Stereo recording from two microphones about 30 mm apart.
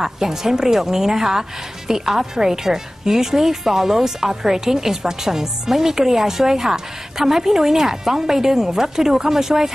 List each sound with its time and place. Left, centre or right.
0.0 s a woman's voice: centre